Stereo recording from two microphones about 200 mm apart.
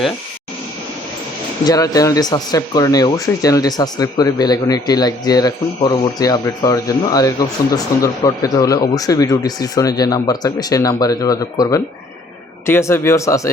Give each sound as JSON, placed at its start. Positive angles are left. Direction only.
{"t": 1.6, "sound": "speech", "side_deg": 15}